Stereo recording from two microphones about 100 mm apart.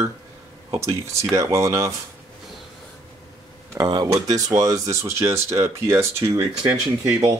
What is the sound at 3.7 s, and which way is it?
Speech, 40° right (ahead or behind).